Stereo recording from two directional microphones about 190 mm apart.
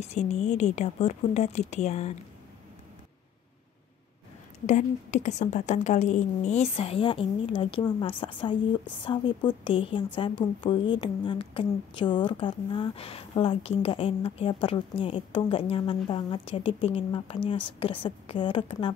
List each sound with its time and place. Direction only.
0.0 s a woman's voice: 35° left (ahead or behind)
4.6 s a woman's voice: 40° left (ahead or behind)